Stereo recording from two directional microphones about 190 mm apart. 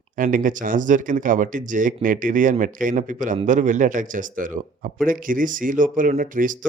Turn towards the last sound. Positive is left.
turn(degrees=-45)  # may be behind; listen again after turning